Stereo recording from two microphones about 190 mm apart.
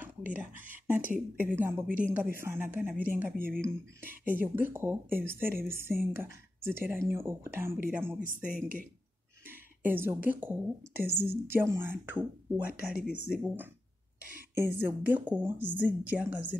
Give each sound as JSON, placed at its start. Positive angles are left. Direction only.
{"t": 0.3, "sound": "speech", "side_deg": -10}
{"t": 3.3, "sound": "speech", "side_deg": -50}
{"t": 3.6, "sound": "speech", "side_deg": -10}
{"t": 8.5, "sound": "speech", "side_deg": -45}
{"t": 9.5, "sound": "speech", "side_deg": -10}
{"t": 14.8, "sound": "speech", "side_deg": -10}